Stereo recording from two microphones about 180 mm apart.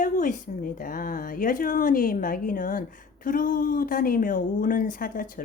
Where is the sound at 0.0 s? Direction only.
45° left (ahead or behind).